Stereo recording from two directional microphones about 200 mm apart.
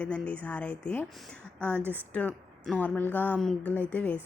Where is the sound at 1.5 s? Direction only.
10° right (ahead or behind).